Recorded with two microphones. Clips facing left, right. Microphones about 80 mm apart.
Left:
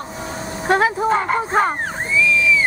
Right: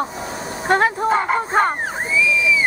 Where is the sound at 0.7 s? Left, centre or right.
Centre.